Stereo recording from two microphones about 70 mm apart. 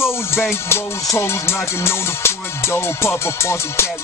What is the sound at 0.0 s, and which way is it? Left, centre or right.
Music, left.